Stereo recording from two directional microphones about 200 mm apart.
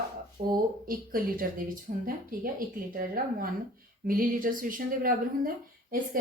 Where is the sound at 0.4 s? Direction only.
40° right (ahead or behind).